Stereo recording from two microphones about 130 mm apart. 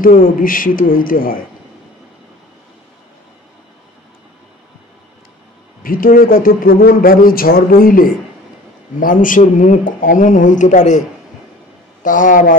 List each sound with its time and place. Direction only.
0.0 s a man's voice: 90° left
5.8 s a man's voice: 90° left; by 11.0 s 75° left (ahead or behind)
12.0 s a man's voice: 90° left